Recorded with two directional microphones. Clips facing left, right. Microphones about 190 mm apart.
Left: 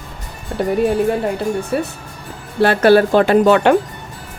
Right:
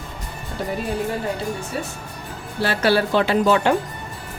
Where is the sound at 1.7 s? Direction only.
60° left (ahead or behind).